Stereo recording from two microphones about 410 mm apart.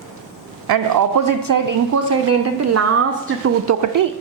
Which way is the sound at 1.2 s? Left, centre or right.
Right.